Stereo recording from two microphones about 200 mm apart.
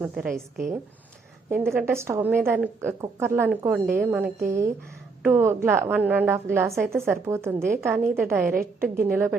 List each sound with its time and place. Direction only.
0.0 s a woman's voice: 5° right (ahead or behind)
1.5 s a woman's voice: 10° right (ahead or behind)
8.8 s a woman's voice: 50° right (ahead or behind)